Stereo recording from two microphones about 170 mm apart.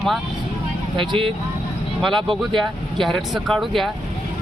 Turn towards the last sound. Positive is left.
turn(degrees=0)  # may be behind; listen again after turning